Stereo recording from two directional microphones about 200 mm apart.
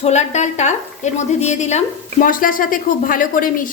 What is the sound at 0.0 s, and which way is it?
A woman's voice, 35° left (ahead or behind).